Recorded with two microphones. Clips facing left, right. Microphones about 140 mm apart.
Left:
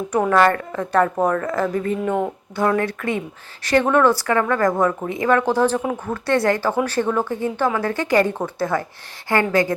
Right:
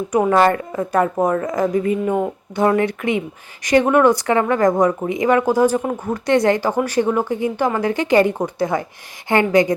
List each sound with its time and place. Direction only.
0.1 s speech: 10° right (ahead or behind)
2.0 s speech: 5° right (ahead or behind)
2.6 s speech: 20° right (ahead or behind)